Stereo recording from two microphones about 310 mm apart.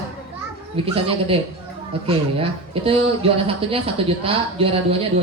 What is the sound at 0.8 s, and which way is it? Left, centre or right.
A man's voice, centre.